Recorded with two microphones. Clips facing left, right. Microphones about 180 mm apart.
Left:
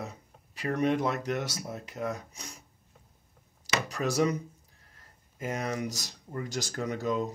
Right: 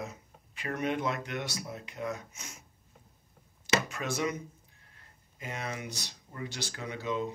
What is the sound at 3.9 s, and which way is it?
Speech, 40° left (ahead or behind).